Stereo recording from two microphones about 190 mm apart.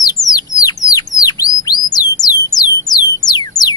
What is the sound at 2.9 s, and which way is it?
Music, 20° left (ahead or behind).